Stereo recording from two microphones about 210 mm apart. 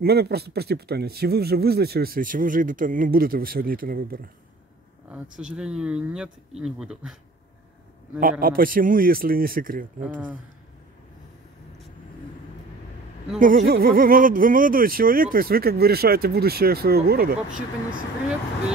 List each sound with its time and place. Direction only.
0.0 s speech: 50° right (ahead or behind)
5.4 s speech: 5° right (ahead or behind)
8.2 s speech: 40° right (ahead or behind)
10.0 s speech: 5° right (ahead or behind)
13.4 s speech: 40° right (ahead or behind)